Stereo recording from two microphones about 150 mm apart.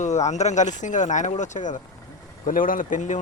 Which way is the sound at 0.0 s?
50° left (ahead or behind).